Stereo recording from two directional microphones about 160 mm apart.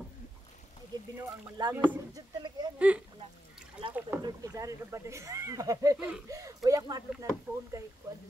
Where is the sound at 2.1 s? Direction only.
25° right (ahead or behind).